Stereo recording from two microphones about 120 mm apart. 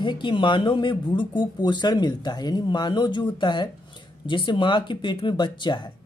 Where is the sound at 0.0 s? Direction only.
40° left (ahead or behind).